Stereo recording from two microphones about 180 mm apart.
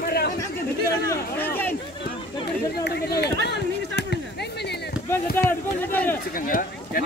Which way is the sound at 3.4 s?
70° left (ahead or behind).